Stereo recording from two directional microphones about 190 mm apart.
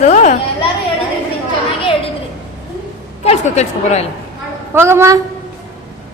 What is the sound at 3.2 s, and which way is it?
Speech, 35° left (ahead or behind).